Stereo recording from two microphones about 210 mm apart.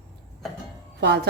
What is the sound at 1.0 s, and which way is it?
Speech, 50° right (ahead or behind).